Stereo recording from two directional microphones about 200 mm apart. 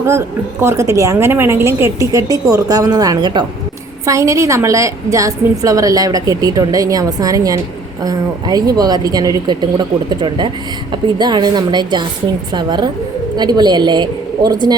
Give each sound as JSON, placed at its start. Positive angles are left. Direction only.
{"t": 0.0, "sound": "a woman's voice", "side_deg": -15}